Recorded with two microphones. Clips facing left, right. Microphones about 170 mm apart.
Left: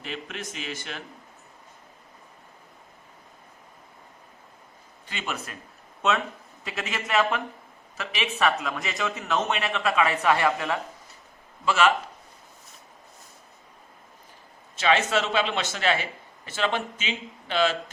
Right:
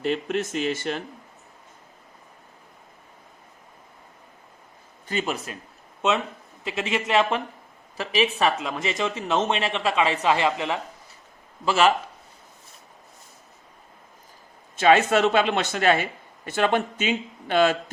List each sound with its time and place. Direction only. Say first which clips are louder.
0.0 s speech: right 11 dB; 45° right (ahead or behind)
5.0 s a man's voice: right 7 dB; 40° right (ahead or behind)
6.7 s speech: right 5 dB; 25° right (ahead or behind)
11.6 s a man's voice: right 2 dB; 35° right (ahead or behind)
14.8 s speech: right 5 dB; 50° right (ahead or behind)